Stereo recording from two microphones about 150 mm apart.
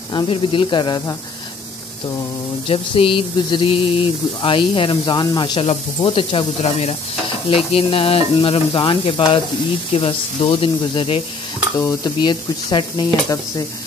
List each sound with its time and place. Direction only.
0.1 s speech: 35° left (ahead or behind)
2.7 s speech: 35° left (ahead or behind)
11.8 s sizzle: 30° left (ahead or behind)